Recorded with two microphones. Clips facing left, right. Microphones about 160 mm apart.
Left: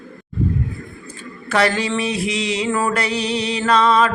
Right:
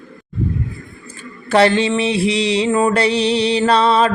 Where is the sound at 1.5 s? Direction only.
30° right (ahead or behind).